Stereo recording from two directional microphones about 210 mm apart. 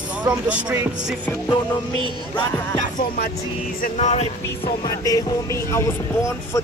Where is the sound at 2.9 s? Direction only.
45° left (ahead or behind).